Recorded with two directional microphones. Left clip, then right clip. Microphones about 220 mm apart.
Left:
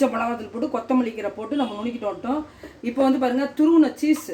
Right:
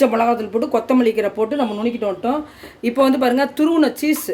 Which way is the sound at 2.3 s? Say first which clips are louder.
Right 4 dB; 50° right (ahead or behind).